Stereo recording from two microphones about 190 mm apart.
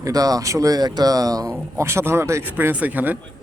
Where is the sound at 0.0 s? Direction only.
20° right (ahead or behind).